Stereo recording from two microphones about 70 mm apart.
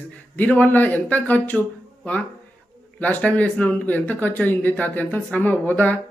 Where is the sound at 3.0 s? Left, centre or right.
Left.